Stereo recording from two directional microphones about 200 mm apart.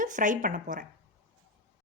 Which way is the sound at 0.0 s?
40° right (ahead or behind).